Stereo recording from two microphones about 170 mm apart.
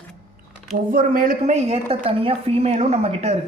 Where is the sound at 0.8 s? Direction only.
55° right (ahead or behind); by 3.4 s 40° right (ahead or behind).